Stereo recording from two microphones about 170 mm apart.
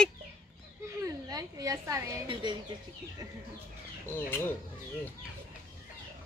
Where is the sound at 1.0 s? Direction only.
20° right (ahead or behind).